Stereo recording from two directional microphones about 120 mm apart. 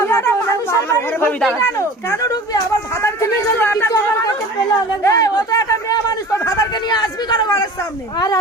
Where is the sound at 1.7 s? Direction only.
25° left (ahead or behind).